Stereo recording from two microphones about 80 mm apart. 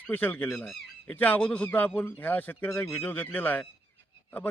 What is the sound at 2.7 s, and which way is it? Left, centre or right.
Speech, left.